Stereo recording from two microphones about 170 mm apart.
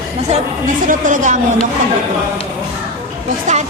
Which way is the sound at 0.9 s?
50° right (ahead or behind).